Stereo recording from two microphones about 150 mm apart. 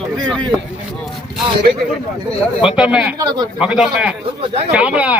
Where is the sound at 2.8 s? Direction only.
5° right (ahead or behind).